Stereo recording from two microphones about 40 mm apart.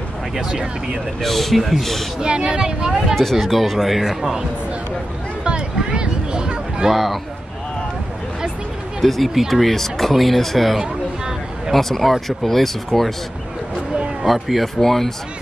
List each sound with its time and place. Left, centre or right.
0.4 s speech: centre
1.2 s speech: centre
2.1 s speech: right
3.2 s speech: centre
5.4 s a sound: right
6.9 s speech: centre
9.0 s speech: centre
10.8 s a sound: centre
11.7 s speech: centre
14.2 s speech: centre
14.8 s speech: centre